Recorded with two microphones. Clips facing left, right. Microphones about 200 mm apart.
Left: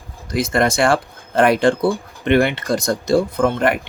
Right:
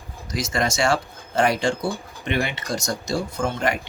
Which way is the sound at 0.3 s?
55° left (ahead or behind).